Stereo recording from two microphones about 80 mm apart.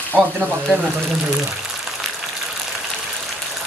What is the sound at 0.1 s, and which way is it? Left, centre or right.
Speech, centre.